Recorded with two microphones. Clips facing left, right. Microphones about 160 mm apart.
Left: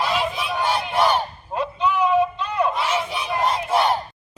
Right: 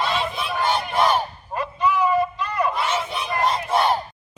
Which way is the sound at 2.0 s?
10° right (ahead or behind).